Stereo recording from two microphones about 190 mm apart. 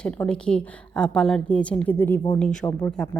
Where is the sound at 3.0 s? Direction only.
5° left (ahead or behind).